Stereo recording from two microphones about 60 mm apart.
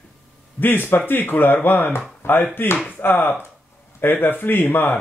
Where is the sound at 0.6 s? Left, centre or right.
Left.